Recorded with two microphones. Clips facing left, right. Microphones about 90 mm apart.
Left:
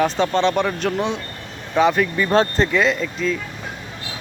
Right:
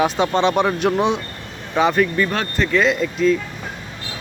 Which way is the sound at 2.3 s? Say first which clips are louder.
Left 5 dB; 30° left (ahead or behind).